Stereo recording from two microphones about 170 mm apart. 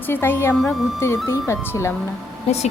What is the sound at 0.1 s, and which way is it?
Speech, 15° left (ahead or behind).